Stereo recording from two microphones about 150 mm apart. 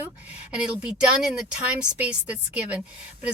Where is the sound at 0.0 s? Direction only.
10° right (ahead or behind).